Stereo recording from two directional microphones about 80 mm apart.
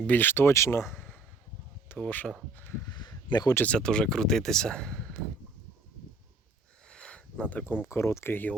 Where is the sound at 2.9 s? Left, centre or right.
Left.